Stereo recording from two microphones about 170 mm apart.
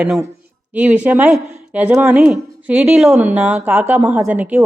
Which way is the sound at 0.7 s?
10° right (ahead or behind).